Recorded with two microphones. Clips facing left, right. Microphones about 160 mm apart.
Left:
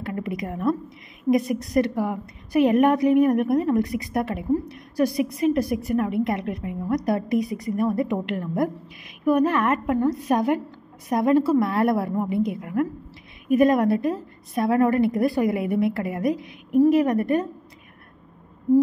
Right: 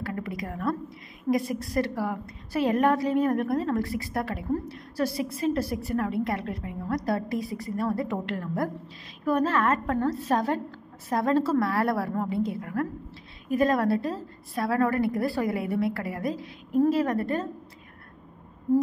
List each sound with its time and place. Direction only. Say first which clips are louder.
0.0 s a woman's voice: left 4 dB; 20° left (ahead or behind)